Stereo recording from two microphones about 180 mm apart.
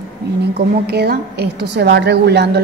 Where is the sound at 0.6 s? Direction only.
65° right (ahead or behind).